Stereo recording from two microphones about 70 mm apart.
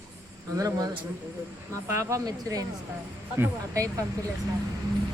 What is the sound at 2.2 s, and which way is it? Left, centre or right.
Speech, right.